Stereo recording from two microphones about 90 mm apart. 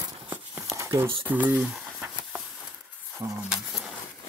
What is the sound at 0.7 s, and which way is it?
Crumpling, 35° right (ahead or behind).